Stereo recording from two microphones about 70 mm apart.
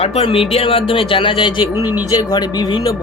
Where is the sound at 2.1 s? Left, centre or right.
Left.